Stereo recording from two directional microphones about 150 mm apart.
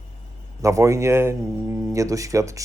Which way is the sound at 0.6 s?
20° right (ahead or behind).